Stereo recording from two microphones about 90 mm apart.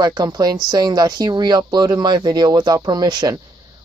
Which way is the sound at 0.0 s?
45° right (ahead or behind).